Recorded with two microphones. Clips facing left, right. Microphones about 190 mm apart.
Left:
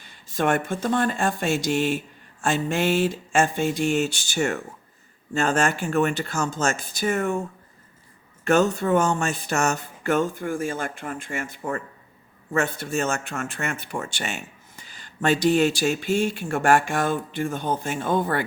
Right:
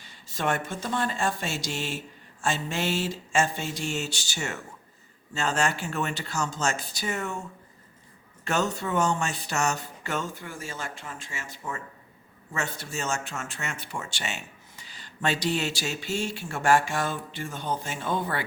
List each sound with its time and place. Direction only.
0.0 s speech: 55° left (ahead or behind)
8.4 s speech: 55° left (ahead or behind)